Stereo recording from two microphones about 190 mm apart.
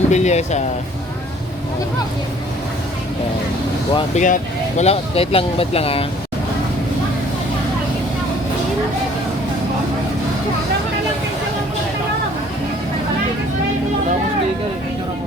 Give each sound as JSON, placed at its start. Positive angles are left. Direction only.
{"t": 0.1, "sound": "speech", "side_deg": 35}
{"t": 3.9, "sound": "speech", "side_deg": 40}